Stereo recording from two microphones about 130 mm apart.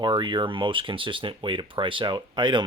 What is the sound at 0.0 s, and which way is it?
Speech, 35° right (ahead or behind).